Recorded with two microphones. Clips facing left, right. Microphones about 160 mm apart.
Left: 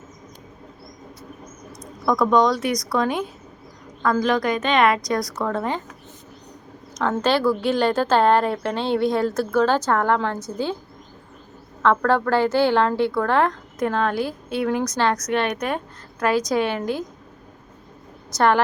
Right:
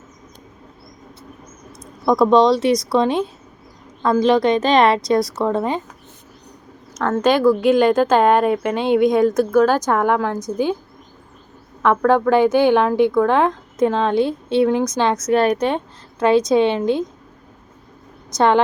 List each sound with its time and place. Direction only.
1.8 s a woman's voice: 25° right (ahead or behind)
7.2 s speech: 10° right (ahead or behind)
11.8 s speech: 15° right (ahead or behind)
15.3 s a woman's voice: 35° right (ahead or behind)
18.3 s a woman's voice: 20° right (ahead or behind)